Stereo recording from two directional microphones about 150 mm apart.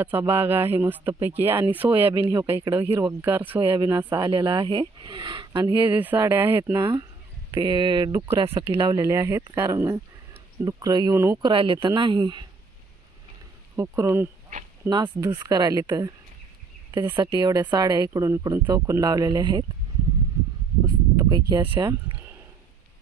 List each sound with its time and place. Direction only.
0.0 s speech: 15° right (ahead or behind); by 5.8 s 30° right (ahead or behind)
5.8 s speech: 10° right (ahead or behind); by 8.6 s 35° right (ahead or behind)
8.7 s speech: 20° right (ahead or behind)
11.4 s speech: 35° right (ahead or behind)
13.7 s speech: 20° right (ahead or behind)
17.2 s speech: 25° right (ahead or behind)
20.8 s speech: 25° right (ahead or behind)